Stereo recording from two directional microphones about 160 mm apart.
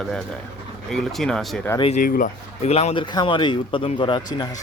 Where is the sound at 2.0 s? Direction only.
60° left (ahead or behind).